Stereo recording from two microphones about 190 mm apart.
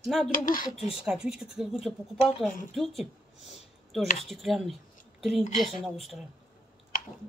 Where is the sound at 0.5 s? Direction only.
45° left (ahead or behind).